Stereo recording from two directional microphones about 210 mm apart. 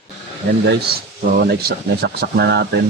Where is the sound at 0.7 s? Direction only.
50° right (ahead or behind).